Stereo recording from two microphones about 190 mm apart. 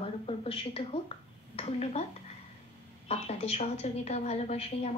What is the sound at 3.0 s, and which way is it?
A woman's voice, 35° left (ahead or behind).